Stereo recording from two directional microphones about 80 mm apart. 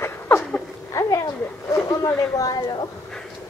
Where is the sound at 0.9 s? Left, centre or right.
Left.